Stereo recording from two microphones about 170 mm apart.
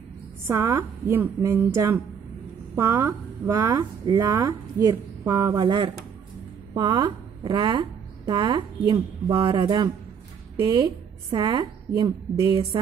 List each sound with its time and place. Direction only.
0.5 s a woman's voice: 15° right (ahead or behind)
2.7 s a woman's voice: 15° right (ahead or behind)